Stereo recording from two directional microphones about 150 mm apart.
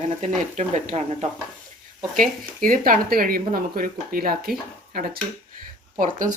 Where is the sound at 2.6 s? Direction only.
65° right (ahead or behind); by 5.2 s 85° right.